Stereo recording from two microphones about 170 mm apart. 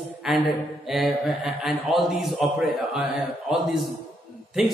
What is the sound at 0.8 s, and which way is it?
A man's voice, centre (ahead or behind).